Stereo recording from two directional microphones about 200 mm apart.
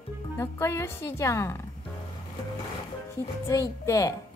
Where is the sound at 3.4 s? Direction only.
15° left (ahead or behind).